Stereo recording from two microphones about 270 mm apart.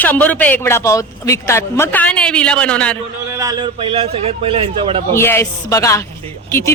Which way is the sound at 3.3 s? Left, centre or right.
Centre.